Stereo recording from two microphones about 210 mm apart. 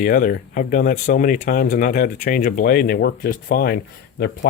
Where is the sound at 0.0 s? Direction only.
45° left (ahead or behind).